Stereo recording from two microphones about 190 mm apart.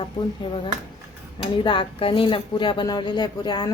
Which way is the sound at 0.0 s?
25° left (ahead or behind).